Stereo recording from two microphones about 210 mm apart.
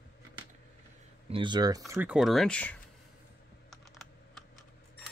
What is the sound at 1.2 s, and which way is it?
Speech, 25° right (ahead or behind).